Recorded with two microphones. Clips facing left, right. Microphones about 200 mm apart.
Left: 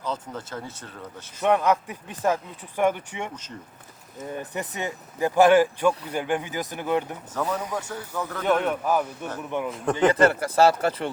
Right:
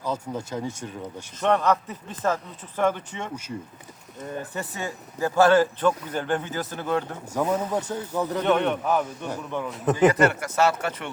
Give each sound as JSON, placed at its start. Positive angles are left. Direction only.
{"t": 0.0, "sound": "a man's voice", "side_deg": -10}
{"t": 1.4, "sound": "speech", "side_deg": 10}
{"t": 4.5, "sound": "speech", "side_deg": 20}
{"t": 7.3, "sound": "a man's voice", "side_deg": -15}
{"t": 8.4, "sound": "a man's voice", "side_deg": 5}
{"t": 10.1, "sound": "speech", "side_deg": 30}